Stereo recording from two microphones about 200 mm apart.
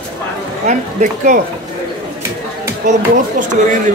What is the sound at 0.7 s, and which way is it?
Speech, 40° right (ahead or behind).